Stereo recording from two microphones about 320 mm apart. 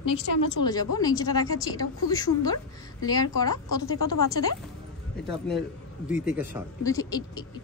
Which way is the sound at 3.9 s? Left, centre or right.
Left.